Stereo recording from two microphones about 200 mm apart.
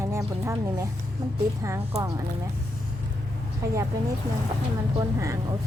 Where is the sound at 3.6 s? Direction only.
15° right (ahead or behind).